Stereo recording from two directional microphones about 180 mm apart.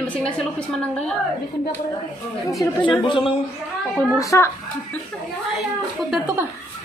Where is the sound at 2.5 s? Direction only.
20° left (ahead or behind).